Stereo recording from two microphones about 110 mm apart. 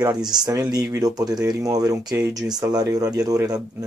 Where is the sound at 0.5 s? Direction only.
35° right (ahead or behind).